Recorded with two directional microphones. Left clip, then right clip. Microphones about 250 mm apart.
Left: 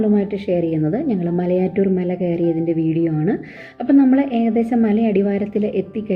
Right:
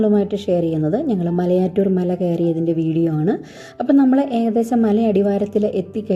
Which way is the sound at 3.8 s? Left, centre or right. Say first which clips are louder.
Even; right.